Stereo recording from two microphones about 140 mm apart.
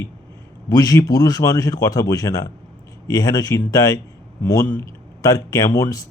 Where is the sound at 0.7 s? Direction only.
25° left (ahead or behind).